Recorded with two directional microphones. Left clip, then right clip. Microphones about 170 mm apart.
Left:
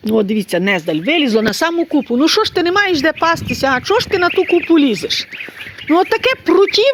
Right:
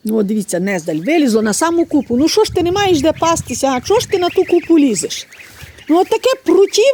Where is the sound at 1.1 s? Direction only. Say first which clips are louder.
Right 1 dB; 40° right (ahead or behind).